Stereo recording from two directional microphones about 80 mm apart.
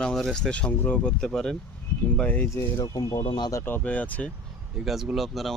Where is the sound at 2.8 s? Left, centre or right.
Left.